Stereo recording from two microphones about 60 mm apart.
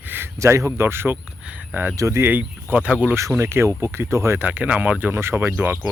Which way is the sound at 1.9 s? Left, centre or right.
Right.